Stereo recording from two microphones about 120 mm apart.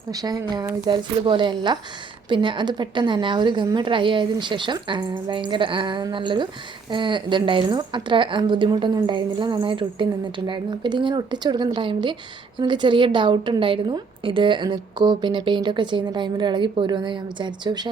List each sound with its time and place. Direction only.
0.1 s a woman's voice: 30° right (ahead or behind)
0.9 s a woman's voice: 40° right (ahead or behind)